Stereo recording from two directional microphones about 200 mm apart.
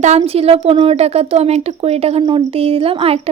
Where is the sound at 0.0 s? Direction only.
30° right (ahead or behind).